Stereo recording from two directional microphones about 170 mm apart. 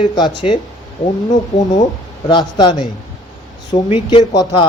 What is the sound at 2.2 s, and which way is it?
Speech, 25° left (ahead or behind).